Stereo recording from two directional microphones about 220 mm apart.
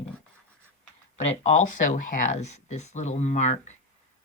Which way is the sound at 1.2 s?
35° left (ahead or behind).